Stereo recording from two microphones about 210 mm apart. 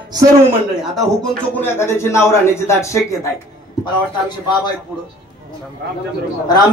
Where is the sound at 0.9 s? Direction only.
5° left (ahead or behind).